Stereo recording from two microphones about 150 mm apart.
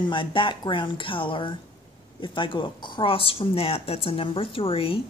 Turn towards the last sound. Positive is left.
turn(degrees=40)  # may be behind; listen again after turning